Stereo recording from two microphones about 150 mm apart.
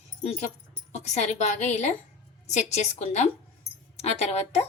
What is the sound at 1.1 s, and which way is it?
Speech, 50° left (ahead or behind).